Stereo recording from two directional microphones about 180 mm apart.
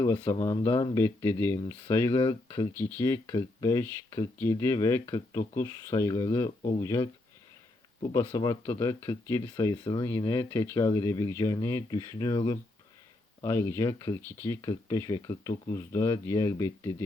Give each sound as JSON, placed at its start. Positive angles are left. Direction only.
{"t": 0.0, "sound": "speech", "side_deg": 15}
{"t": 2.1, "sound": "speech", "side_deg": 30}
{"t": 2.7, "sound": "speech", "side_deg": 10}
{"t": 8.1, "sound": "speech", "side_deg": 20}